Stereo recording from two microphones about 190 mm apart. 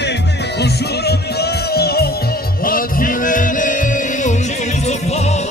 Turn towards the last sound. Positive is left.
turn(degrees=35)  # may be behind; listen again after turning